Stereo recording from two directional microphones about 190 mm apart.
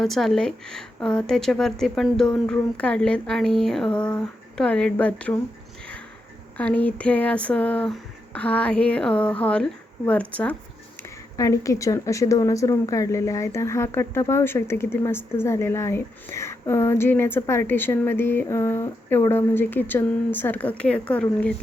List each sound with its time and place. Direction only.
0.0 s speech: centre (ahead or behind)
6.6 s a woman's voice: 5° left (ahead or behind)